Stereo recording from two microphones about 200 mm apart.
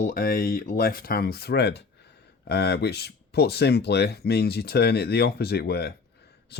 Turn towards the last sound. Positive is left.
turn(degrees=55)  # may be behind; listen again after turning